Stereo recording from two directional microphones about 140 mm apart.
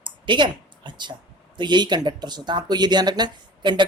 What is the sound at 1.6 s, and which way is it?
A woman's voice, 30° right (ahead or behind).